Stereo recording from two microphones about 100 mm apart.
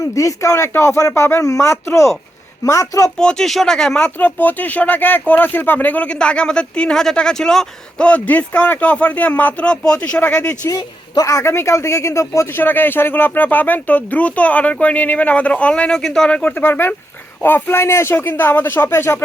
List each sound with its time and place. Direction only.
0.1 s speech: 30° left (ahead or behind)
3.2 s speech: 5° left (ahead or behind)
10.7 s speech: 40° left (ahead or behind)
12.5 s speech: 20° left (ahead or behind)